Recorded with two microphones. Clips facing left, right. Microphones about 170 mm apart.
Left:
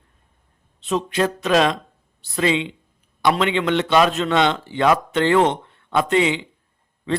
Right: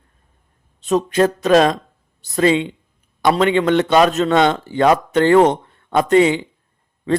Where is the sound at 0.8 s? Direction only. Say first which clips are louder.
Right 5 dB; 45° right (ahead or behind).